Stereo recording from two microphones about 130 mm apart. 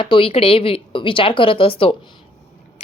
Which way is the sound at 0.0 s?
40° left (ahead or behind).